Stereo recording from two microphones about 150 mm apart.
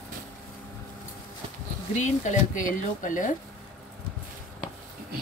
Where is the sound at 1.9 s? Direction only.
55° left (ahead or behind).